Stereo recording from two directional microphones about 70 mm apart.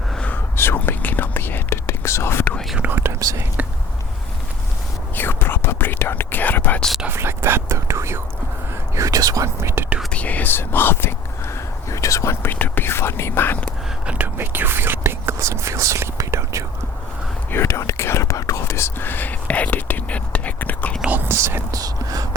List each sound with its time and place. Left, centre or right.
0.5 s whispering: left
2.9 s speech: right
5.1 s whispering: left
7.1 s speech: right
9.0 s speech: right
9.6 s speech: right
10.1 s speech: left
11.9 s speech: left
12.4 s speech: left
14.3 s speech: right
17.5 s speech: left
21.2 s speech: right
21.7 s speech: right